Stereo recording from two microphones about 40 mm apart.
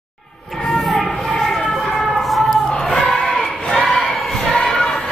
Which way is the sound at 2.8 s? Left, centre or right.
Centre.